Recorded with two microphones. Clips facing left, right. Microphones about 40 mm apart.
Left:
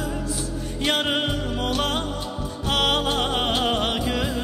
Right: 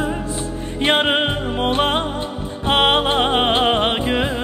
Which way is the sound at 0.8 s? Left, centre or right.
Right.